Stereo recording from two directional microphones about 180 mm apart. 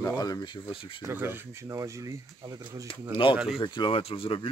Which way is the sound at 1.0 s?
10° right (ahead or behind).